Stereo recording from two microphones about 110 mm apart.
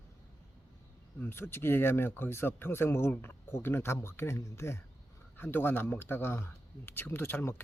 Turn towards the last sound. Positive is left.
turn(degrees=20)  # may be behind; listen again after turning